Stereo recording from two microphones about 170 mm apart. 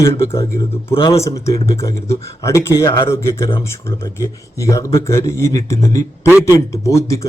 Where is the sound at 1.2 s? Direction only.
15° left (ahead or behind).